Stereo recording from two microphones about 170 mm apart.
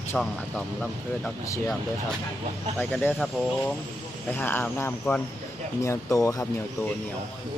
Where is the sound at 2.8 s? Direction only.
5° left (ahead or behind).